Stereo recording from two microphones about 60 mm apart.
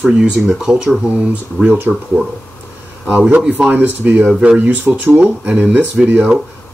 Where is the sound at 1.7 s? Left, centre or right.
Right.